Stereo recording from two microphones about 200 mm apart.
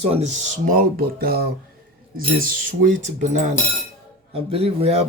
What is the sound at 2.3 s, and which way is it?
Cutlery, 45° right (ahead or behind).